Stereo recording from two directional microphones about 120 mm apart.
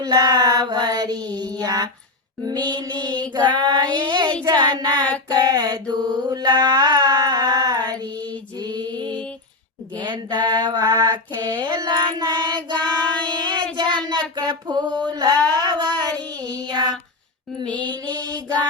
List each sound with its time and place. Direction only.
0.0 s child singing: 35° right (ahead or behind)
1.4 s mantra: 30° right (ahead or behind)
8.1 s mantra: 10° left (ahead or behind)
8.5 s female singing: 35° right (ahead or behind)
10.0 s mantra: 40° right (ahead or behind)
13.7 s music: 35° right (ahead or behind)
15.1 s mantra: 35° right (ahead or behind)
15.6 s child singing: 35° right (ahead or behind)
16.4 s mantra: 30° right (ahead or behind)